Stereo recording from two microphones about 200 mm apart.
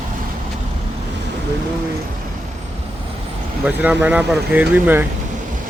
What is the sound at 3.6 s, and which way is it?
Speech, 10° right (ahead or behind).